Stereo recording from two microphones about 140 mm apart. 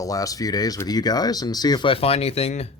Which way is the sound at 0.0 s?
25° left (ahead or behind).